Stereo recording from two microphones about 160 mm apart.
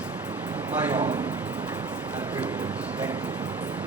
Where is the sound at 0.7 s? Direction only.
10° right (ahead or behind).